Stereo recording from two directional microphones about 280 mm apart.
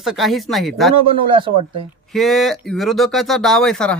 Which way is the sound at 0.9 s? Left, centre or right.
Centre.